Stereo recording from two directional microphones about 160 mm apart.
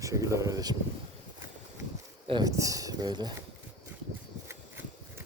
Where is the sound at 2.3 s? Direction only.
25° right (ahead or behind).